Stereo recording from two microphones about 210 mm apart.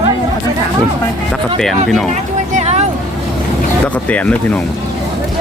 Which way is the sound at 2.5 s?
30° right (ahead or behind).